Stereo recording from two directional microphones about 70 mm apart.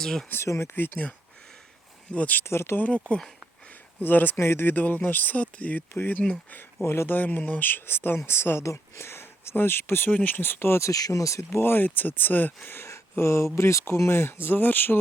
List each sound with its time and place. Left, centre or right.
0.0 s speech: centre
0.4 s speech: left
0.8 s speech: left
2.1 s speech: left
2.4 s speech: left
2.7 s speech: centre
4.4 s speech: left
5.9 s speech: left
7.2 s speech: left